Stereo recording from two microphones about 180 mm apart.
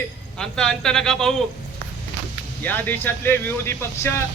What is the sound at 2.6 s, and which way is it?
Speech, 10° left (ahead or behind).